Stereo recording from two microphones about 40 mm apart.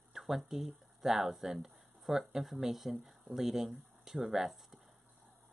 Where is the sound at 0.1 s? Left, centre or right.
Centre.